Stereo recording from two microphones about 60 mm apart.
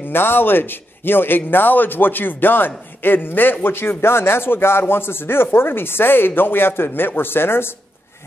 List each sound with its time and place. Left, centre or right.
0.1 s speech: left